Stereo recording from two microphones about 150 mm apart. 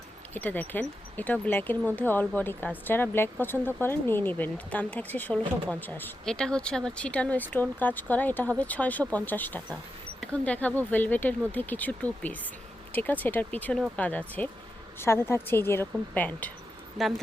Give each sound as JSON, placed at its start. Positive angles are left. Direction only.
{"t": 0.3, "sound": "speech", "side_deg": 10}